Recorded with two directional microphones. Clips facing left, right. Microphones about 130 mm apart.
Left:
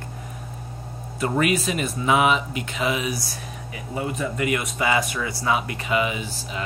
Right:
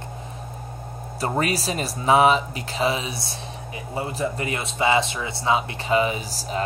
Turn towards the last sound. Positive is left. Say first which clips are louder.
# right 4 dB
turn(degrees=-40)  # may be behind; listen again after turning